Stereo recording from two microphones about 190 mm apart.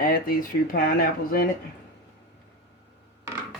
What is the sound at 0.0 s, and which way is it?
Speech, 50° left (ahead or behind).